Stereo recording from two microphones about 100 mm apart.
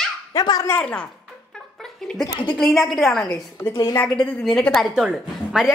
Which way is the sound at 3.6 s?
20° left (ahead or behind).